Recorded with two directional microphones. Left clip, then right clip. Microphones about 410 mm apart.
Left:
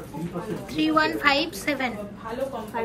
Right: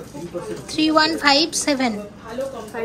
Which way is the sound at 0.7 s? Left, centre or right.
Centre.